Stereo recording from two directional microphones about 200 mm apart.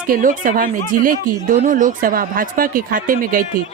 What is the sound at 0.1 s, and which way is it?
Speech, 40° right (ahead or behind).